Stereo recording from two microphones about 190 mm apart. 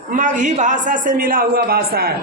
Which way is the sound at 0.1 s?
40° right (ahead or behind).